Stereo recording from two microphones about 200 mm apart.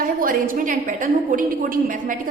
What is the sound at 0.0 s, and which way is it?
A woman's voice, 45° right (ahead or behind).